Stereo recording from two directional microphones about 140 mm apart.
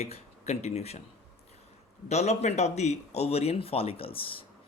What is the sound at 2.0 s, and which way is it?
A man's voice, 55° left (ahead or behind).